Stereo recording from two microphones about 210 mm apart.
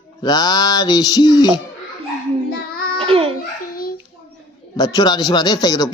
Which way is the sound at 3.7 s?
45° left (ahead or behind).